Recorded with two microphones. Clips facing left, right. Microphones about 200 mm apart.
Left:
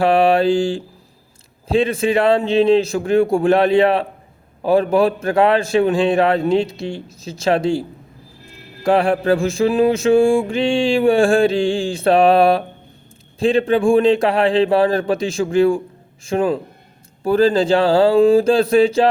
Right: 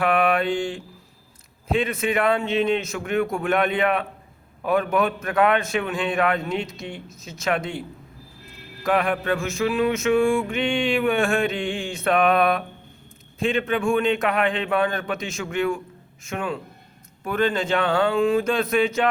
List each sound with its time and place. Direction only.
0.0 s mantra: 30° left (ahead or behind)